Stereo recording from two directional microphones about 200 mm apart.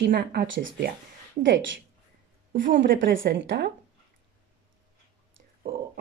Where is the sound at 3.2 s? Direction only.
55° right (ahead or behind).